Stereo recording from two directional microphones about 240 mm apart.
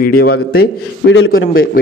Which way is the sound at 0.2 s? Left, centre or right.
Left.